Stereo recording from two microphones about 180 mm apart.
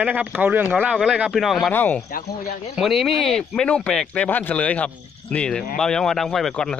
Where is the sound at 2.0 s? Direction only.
60° left (ahead or behind).